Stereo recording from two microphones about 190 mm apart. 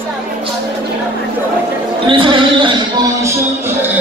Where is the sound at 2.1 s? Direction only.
25° right (ahead or behind).